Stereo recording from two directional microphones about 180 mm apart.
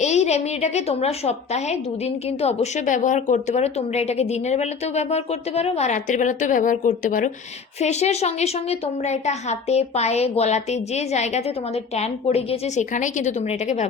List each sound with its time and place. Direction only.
0.0 s a woman's voice: 40° left (ahead or behind)